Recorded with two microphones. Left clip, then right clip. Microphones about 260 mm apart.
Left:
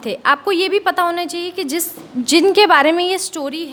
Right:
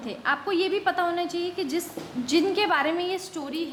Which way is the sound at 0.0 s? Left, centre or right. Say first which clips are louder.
Left 11 dB; left.